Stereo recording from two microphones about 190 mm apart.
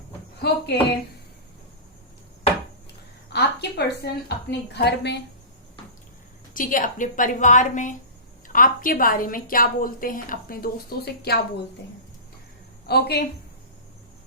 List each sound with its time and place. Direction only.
0.4 s speech: 60° left (ahead or behind)
3.3 s a woman's voice: 60° left (ahead or behind)
6.5 s a woman's voice: 45° left (ahead or behind)
12.9 s speech: 55° left (ahead or behind)